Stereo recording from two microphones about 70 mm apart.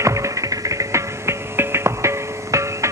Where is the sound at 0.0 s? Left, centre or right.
Right.